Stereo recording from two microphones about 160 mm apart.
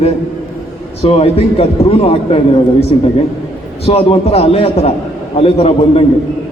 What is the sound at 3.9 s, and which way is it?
A man's voice, 40° left (ahead or behind).